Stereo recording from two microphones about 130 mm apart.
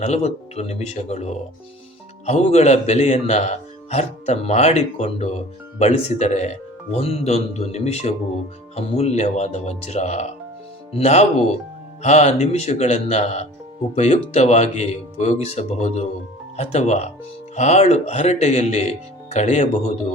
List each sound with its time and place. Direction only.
0.0 s speech: 55° left (ahead or behind)